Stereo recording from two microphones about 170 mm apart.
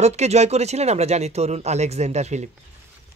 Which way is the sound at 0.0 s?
40° right (ahead or behind).